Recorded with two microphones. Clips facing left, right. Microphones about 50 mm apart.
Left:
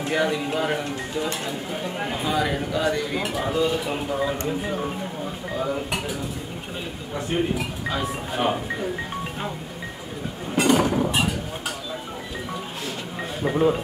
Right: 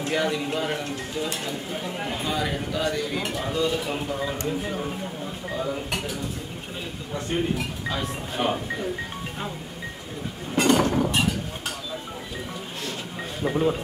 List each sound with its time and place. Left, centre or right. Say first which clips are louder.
0.0 s speech: left 2 dB; centre
7.2 s speech: left 2 dB; centre
10.5 s chink: left 1 dB; centre
13.4 s speech: left 3 dB; centre